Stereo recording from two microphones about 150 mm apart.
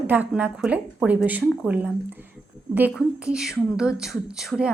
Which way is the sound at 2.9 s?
5° right (ahead or behind).